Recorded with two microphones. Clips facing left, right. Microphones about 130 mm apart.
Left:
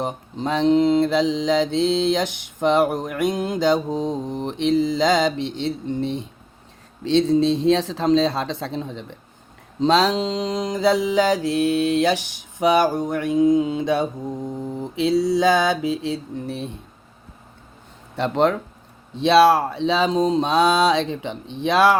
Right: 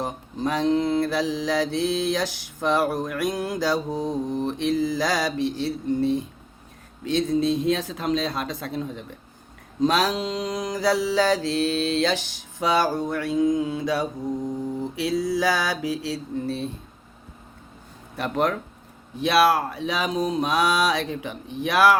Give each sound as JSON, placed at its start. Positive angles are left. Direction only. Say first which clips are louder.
{"t": 0.0, "sound": "mantra", "louder": "left 1 dB", "side_deg": 20}
{"t": 18.2, "sound": "mantra", "louder": "left 5 dB", "side_deg": 25}